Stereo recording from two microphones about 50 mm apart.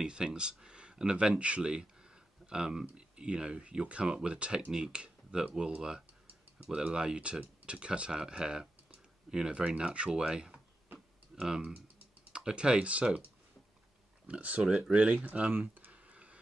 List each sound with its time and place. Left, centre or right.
0.0 s speech: centre
14.2 s speech: right
15.7 s a sound: right